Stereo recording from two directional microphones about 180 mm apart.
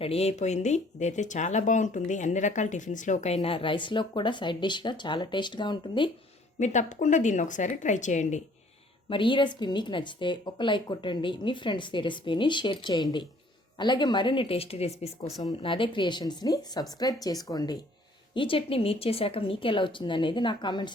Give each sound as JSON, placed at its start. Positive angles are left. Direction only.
{"t": 0.0, "sound": "speech", "side_deg": 35}
{"t": 6.6, "sound": "a woman's voice", "side_deg": 45}
{"t": 9.0, "sound": "a woman's voice", "side_deg": 30}
{"t": 15.4, "sound": "a woman's voice", "side_deg": 25}